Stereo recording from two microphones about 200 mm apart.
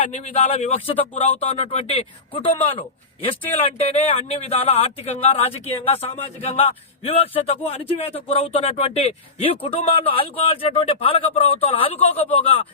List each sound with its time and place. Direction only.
0.0 s speech: 35° left (ahead or behind)